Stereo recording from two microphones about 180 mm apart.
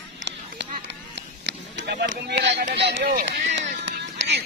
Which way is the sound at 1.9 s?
65° right (ahead or behind).